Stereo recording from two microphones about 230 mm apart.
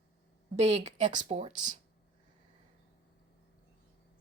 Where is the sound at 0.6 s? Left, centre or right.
Right.